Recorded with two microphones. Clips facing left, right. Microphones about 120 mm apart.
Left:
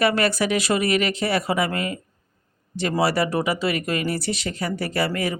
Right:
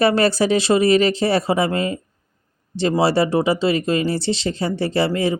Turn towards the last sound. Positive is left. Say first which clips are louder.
# right 5 dB
turn(degrees=-25)  # may be behind; listen again after turning